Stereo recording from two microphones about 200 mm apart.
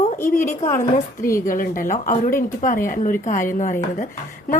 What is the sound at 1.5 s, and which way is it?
Speech, 45° left (ahead or behind).